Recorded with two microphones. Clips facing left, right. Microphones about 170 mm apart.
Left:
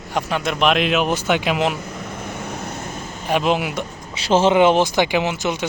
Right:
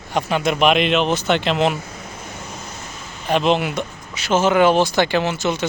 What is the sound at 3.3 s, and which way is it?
Speech, 5° left (ahead or behind).